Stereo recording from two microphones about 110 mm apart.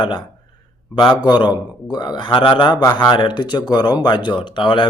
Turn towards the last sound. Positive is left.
turn(degrees=45)  # may be behind; listen again after turning